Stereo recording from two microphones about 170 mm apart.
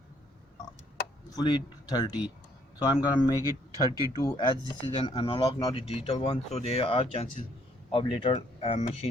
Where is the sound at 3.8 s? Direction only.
20° right (ahead or behind).